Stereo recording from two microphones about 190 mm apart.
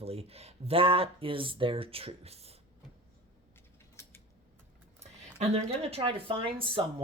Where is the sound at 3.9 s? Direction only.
15° left (ahead or behind).